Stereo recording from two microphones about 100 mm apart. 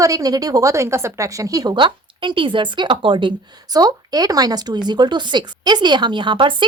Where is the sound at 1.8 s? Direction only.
55° right (ahead or behind).